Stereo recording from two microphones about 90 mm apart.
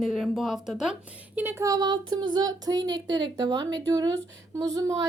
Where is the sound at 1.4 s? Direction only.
35° right (ahead or behind).